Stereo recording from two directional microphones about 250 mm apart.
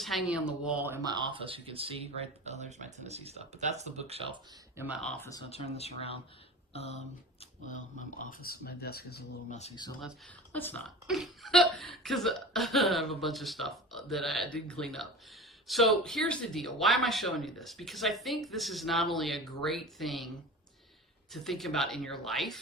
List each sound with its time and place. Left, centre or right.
0.0 s speech: centre; by 4.2 s right
4.8 s speech: centre
5.5 s speech: left
8.2 s speech: left
9.6 s speech: left
10.0 s speech: centre
21.3 s speech: centre